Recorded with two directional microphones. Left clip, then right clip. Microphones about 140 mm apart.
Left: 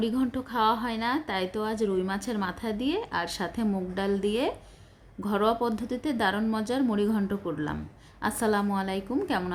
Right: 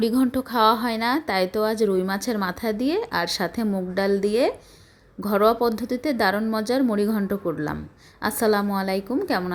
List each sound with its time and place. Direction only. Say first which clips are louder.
0.0 s a woman's voice: right 7 dB; 40° right (ahead or behind); by 9.4 s 25° right (ahead or behind)